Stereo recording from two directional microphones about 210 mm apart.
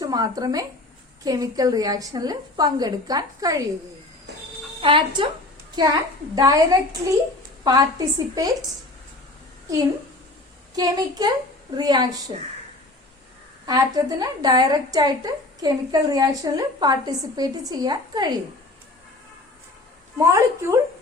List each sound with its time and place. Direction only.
0.0 s a woman's voice: 20° right (ahead or behind)
4.8 s a woman's voice: 25° right (ahead or behind)
6.3 s a woman's voice: 15° right (ahead or behind)
10.8 s a woman's voice: 20° right (ahead or behind)
13.7 s a woman's voice: 20° right (ahead or behind)
20.1 s a woman's voice: 15° right (ahead or behind)